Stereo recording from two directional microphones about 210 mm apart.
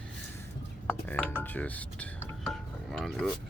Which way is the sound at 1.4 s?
10° left (ahead or behind).